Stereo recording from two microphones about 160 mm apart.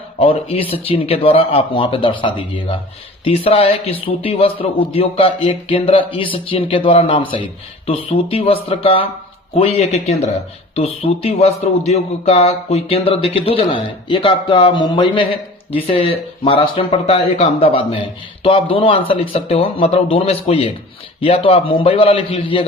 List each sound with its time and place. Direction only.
0.2 s speech: 35° left (ahead or behind)